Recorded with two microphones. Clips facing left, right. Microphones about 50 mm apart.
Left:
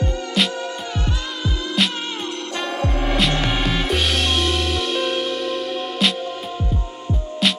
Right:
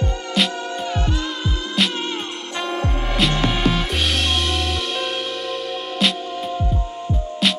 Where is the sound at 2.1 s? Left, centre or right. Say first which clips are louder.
Even; right.